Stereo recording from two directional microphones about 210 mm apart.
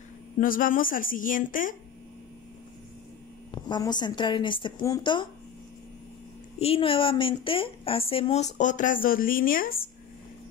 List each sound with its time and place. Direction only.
0.4 s a woman's voice: 40° left (ahead or behind)
3.5 s a woman's voice: 20° left (ahead or behind)
6.6 s a woman's voice: 25° left (ahead or behind); by 9.8 s 45° left (ahead or behind)